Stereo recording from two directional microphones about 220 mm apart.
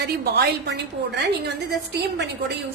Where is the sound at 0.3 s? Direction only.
50° right (ahead or behind).